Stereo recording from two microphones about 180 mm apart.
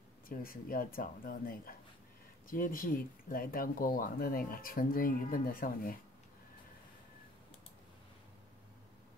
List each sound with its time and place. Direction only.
0.3 s speech: 55° left (ahead or behind)